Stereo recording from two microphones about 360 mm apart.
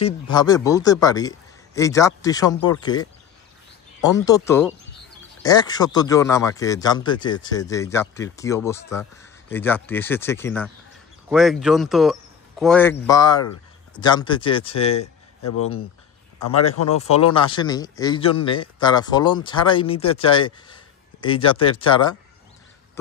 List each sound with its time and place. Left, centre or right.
0.0 s speech: centre
15.4 s a man's voice: left
17.5 s speech: centre